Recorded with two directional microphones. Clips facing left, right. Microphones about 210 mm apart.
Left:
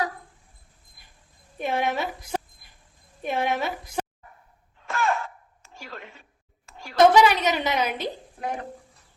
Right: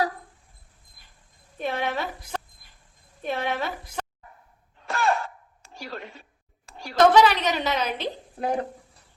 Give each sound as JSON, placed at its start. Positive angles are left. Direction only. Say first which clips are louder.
{"t": 1.5, "sound": "a woman's voice", "louder": "left 2 dB", "side_deg": 10}
{"t": 4.8, "sound": "a sound", "louder": "right 1 dB", "side_deg": -30}
{"t": 7.1, "sound": "a woman's voice", "louder": "even", "side_deg": 10}
{"t": 8.4, "sound": "speech", "louder": "right 7 dB", "side_deg": -35}